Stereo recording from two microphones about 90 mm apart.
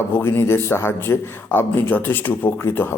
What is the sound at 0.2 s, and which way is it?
A man's voice, 30° left (ahead or behind).